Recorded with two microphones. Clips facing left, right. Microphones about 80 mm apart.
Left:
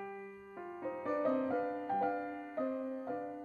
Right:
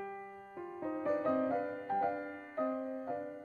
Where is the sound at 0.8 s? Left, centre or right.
Centre.